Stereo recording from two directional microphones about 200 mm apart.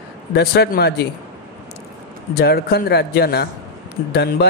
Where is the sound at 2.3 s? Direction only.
50° left (ahead or behind).